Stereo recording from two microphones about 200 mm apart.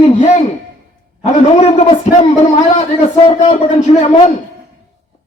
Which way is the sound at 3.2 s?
30° left (ahead or behind).